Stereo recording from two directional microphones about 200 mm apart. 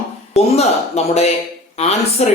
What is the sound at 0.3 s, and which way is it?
Speech, 30° left (ahead or behind).